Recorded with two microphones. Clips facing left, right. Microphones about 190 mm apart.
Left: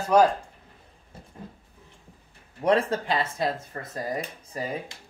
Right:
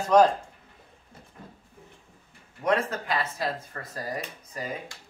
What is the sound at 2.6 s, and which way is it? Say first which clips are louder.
Speech: left 3 dB; 30° left (ahead or behind).